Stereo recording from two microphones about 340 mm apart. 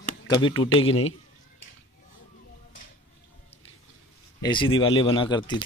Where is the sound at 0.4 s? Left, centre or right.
Centre.